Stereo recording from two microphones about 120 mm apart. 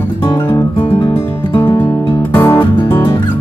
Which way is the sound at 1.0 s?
40° left (ahead or behind).